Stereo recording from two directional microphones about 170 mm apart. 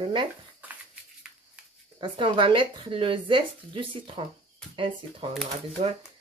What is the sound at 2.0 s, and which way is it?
Speech, 30° right (ahead or behind).